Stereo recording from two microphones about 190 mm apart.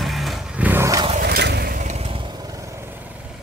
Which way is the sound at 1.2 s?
60° right (ahead or behind).